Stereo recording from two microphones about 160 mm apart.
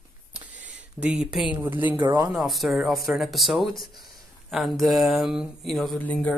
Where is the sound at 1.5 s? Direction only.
15° right (ahead or behind).